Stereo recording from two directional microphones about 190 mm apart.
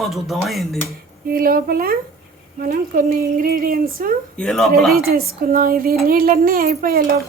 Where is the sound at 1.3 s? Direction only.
50° right (ahead or behind).